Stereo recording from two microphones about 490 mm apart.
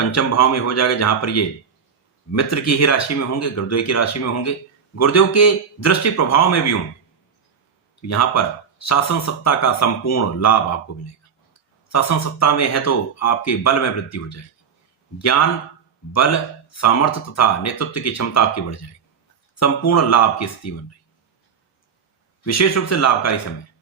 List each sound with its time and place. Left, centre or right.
0.1 s speech: left
8.0 s speech: left
11.9 s speech: left
22.4 s speech: left